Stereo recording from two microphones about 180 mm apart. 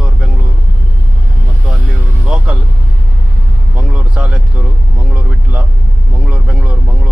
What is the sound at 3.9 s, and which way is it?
Speech, 10° right (ahead or behind).